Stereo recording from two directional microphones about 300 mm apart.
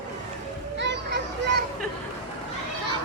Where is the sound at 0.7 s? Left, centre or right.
Right.